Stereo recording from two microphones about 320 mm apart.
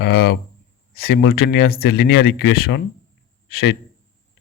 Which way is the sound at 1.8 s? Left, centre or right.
Left.